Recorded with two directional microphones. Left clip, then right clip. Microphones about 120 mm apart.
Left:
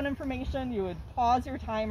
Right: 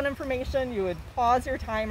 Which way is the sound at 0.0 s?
40° right (ahead or behind).